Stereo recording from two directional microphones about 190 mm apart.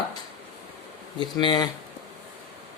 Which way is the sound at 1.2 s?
25° left (ahead or behind).